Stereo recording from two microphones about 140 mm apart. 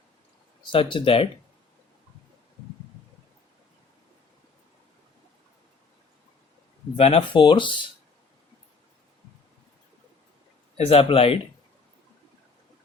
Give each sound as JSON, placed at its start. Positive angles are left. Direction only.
{"t": 0.7, "sound": "speech", "side_deg": 35}
{"t": 6.9, "sound": "speech", "side_deg": 45}
{"t": 10.8, "sound": "speech", "side_deg": 45}